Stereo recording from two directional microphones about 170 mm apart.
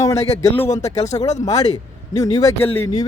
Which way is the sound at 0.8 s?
40° left (ahead or behind).